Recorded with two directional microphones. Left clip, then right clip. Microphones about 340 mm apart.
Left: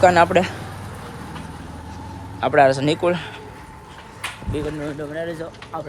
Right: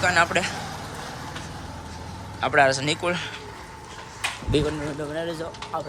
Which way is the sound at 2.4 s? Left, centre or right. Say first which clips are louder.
Left 4 dB; centre.